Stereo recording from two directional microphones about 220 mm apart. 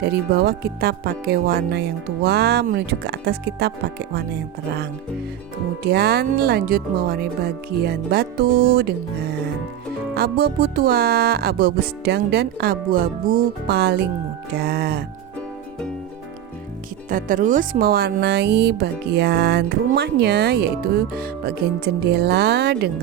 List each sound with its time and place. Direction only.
0.0 s speech: 45° right (ahead or behind)
5.8 s speech: 45° right (ahead or behind)
17.1 s speech: 35° right (ahead or behind)